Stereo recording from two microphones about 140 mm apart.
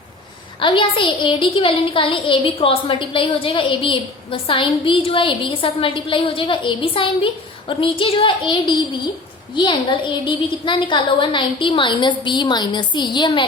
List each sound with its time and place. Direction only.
0.6 s a woman's voice: 35° left (ahead or behind)